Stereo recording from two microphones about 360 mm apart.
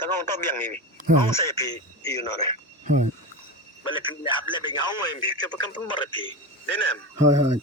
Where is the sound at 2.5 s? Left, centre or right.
Centre.